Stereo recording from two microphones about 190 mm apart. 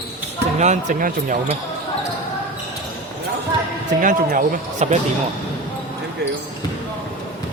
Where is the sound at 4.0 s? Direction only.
45° right (ahead or behind).